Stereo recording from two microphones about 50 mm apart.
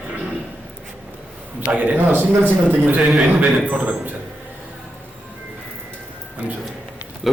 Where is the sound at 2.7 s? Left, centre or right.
Right.